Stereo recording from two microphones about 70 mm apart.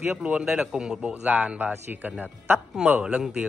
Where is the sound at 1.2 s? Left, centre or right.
Right.